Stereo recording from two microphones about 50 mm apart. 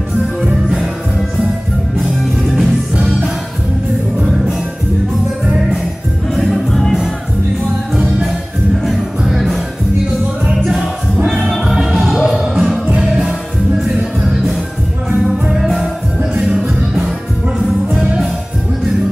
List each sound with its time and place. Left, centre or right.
0.4 s music: centre
2.4 s music: centre
3.0 s music: centre
6.3 s music: centre
7.9 s music: centre
10.6 s music: centre
11.2 s music: centre
14.2 s music: centre
15.0 s music: right
15.5 s music: centre